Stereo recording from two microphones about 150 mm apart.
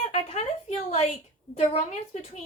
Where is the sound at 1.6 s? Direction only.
50° left (ahead or behind).